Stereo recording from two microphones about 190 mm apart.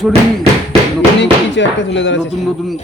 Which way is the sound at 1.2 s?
70° left (ahead or behind).